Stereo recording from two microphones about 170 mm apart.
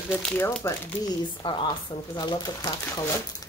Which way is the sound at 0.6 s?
20° left (ahead or behind).